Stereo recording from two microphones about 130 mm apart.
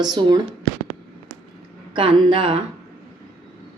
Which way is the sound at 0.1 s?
35° right (ahead or behind).